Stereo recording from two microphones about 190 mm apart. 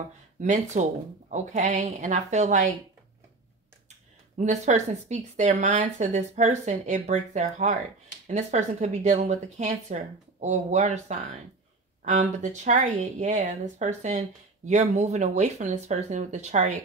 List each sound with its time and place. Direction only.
0.4 s speech: 40° right (ahead or behind)
4.4 s speech: 40° right (ahead or behind)